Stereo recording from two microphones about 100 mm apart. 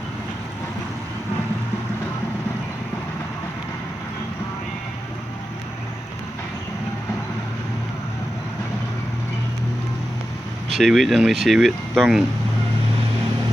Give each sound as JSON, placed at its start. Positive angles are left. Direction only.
{"t": 10.8, "sound": "speech", "side_deg": 0}